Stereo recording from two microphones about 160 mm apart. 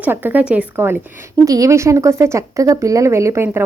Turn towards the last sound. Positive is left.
turn(degrees=-15)  # may be behind; listen again after turning